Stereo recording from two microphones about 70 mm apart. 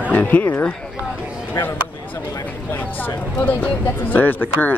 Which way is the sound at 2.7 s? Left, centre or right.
Left.